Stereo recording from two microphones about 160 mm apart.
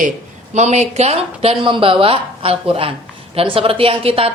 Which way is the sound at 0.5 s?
45° right (ahead or behind).